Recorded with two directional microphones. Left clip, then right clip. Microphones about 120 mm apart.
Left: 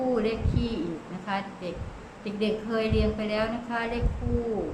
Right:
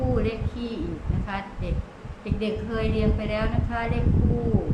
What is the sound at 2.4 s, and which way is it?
A woman's voice, 10° left (ahead or behind).